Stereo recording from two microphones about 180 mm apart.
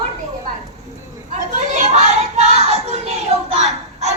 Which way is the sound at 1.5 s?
40° right (ahead or behind).